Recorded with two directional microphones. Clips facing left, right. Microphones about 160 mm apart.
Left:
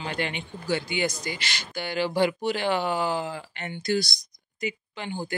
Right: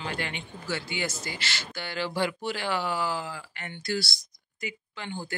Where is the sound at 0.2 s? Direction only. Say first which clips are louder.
Left 5 dB; 15° left (ahead or behind).